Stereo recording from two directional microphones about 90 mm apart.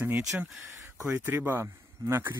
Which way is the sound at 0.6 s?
30° right (ahead or behind).